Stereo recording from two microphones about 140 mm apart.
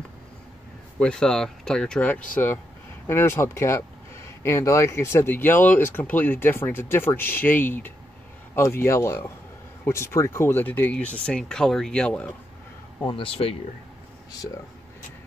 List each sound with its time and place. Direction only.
0.9 s speech: 5° left (ahead or behind)
13.0 s speech: 40° left (ahead or behind)
14.4 s speech: 25° left (ahead or behind)